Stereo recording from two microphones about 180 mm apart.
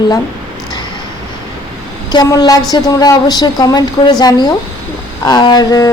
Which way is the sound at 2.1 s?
20° left (ahead or behind).